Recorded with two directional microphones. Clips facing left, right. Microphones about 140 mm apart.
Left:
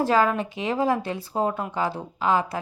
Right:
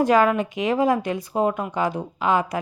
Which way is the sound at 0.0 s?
15° right (ahead or behind).